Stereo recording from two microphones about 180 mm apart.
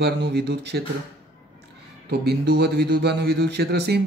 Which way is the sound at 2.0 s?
65° right (ahead or behind).